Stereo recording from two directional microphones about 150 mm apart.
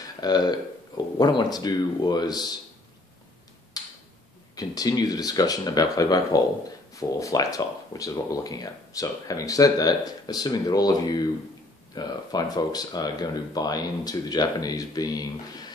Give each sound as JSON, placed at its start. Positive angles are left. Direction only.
{"t": 0.2, "sound": "speech", "side_deg": 25}
{"t": 3.8, "sound": "tick-tock", "side_deg": 25}
{"t": 4.6, "sound": "speech", "side_deg": 25}